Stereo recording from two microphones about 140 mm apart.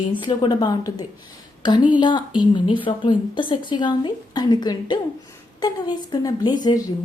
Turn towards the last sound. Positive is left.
turn(degrees=30)  # may be behind; listen again after turning